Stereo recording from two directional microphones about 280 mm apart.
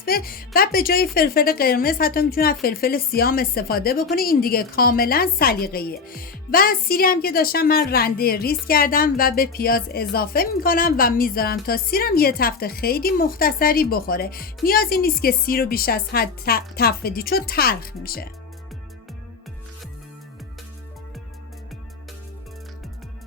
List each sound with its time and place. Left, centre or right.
0.0 s a woman's voice: left